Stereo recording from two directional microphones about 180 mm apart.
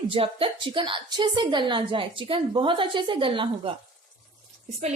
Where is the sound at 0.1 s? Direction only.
30° right (ahead or behind).